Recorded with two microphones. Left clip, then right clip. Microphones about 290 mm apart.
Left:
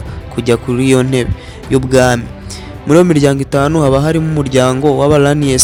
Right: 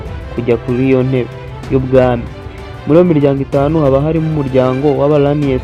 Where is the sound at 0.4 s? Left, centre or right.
Left.